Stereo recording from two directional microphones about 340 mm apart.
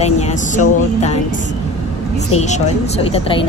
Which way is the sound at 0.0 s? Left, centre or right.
Centre.